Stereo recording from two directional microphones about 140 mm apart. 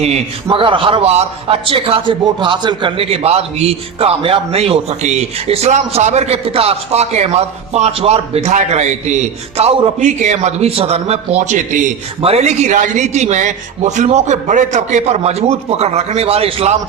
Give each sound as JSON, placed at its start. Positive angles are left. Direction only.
{"t": 0.5, "sound": "a man's voice", "side_deg": -40}
{"t": 12.2, "sound": "a man's voice", "side_deg": -50}